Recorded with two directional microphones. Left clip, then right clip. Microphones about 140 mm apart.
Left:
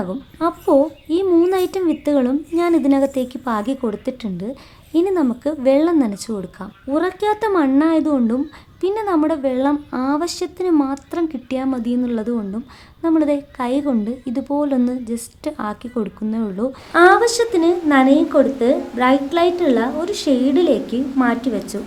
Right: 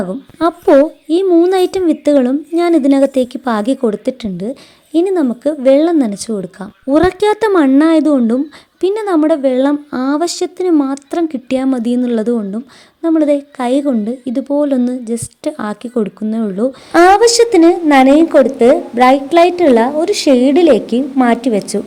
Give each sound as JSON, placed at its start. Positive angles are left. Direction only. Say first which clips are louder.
{"t": 0.3, "sound": "a woman's voice", "louder": "right 6 dB", "side_deg": -40}
{"t": 6.8, "sound": "a woman's voice", "louder": "right 8 dB", "side_deg": -45}
{"t": 16.9, "sound": "a woman's voice", "louder": "right 4 dB", "side_deg": -50}